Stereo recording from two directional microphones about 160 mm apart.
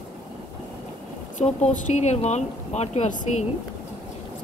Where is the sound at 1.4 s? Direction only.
50° left (ahead or behind).